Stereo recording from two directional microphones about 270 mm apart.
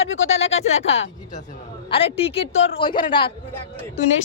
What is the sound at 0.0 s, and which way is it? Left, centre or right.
Speech, left.